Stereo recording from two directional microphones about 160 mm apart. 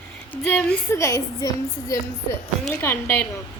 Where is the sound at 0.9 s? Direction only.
20° left (ahead or behind).